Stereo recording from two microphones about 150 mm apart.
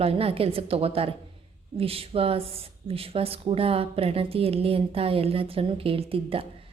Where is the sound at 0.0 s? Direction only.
40° right (ahead or behind).